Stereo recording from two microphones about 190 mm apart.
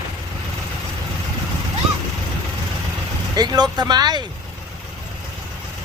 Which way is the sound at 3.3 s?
20° right (ahead or behind).